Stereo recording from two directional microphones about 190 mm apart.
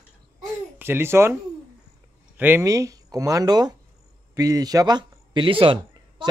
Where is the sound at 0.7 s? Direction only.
10° right (ahead or behind).